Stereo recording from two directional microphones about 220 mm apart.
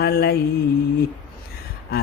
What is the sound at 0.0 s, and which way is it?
Mantra, 45° left (ahead or behind).